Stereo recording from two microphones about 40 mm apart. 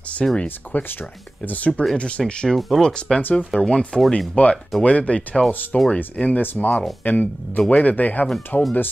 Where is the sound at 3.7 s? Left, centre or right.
Left.